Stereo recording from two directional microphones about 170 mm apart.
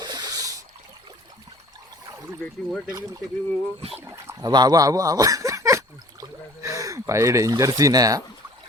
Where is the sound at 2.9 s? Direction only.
20° right (ahead or behind).